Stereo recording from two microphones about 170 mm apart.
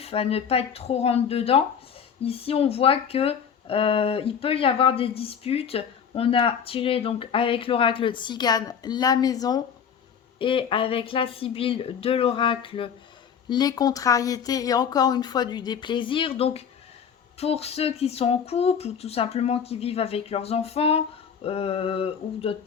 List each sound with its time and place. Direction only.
0.0 s speech: 35° left (ahead or behind)